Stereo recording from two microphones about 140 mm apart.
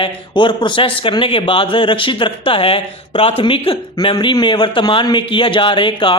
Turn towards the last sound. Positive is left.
turn(degrees=35)  # may be behind; listen again after turning